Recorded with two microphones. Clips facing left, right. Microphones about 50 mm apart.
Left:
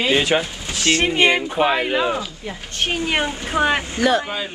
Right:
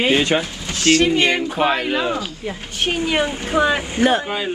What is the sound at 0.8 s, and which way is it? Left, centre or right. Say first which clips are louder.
Speech: right 1 dB; left.